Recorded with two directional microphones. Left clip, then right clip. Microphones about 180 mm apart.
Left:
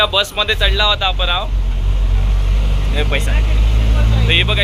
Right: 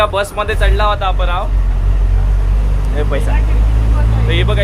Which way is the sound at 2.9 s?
15° right (ahead or behind).